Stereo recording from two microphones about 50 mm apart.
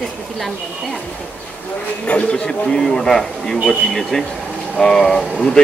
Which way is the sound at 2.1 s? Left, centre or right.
Left.